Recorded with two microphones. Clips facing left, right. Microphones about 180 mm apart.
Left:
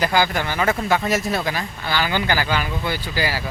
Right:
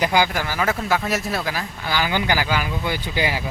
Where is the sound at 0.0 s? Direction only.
15° right (ahead or behind).